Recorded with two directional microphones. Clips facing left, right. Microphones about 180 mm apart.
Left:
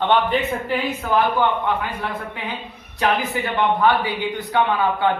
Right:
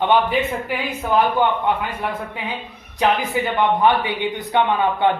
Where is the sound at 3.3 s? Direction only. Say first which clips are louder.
Right 2 dB; 15° right (ahead or behind).